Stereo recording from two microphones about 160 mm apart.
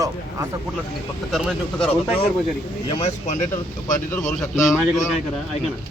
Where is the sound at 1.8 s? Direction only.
35° left (ahead or behind).